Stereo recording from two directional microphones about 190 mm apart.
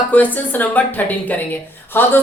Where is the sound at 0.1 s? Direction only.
10° left (ahead or behind).